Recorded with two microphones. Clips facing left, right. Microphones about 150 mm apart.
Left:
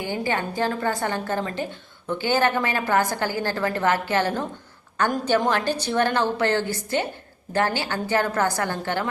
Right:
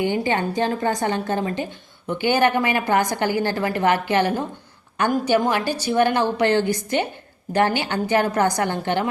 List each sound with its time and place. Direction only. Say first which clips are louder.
0.0 s a woman's voice: right 5 dB; 20° right (ahead or behind)
5.5 s a woman's voice: right 1 dB; 10° right (ahead or behind)